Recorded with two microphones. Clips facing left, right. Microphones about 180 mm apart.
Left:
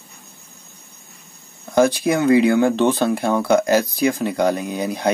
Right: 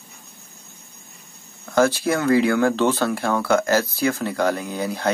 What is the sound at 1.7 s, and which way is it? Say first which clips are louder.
Speech: left 3 dB; 15° left (ahead or behind).